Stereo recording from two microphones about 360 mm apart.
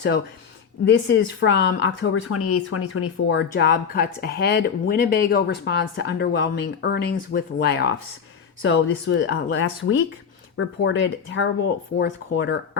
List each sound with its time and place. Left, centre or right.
0.9 s speech: left